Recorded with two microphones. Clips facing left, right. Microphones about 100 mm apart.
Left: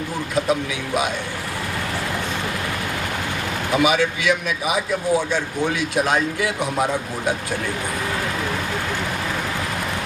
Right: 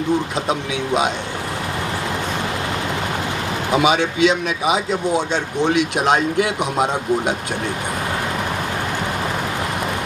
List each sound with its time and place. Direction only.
3.8 s speech: 20° right (ahead or behind)